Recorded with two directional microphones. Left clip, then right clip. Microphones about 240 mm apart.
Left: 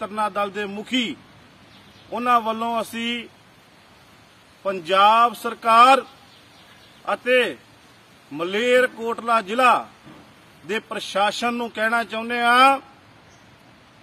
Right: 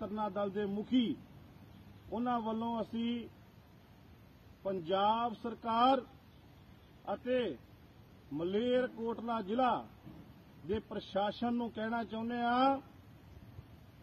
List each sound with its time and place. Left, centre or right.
0.0 s a man's voice: left
2.1 s a man's voice: left
4.6 s a man's voice: left
7.2 s a man's voice: left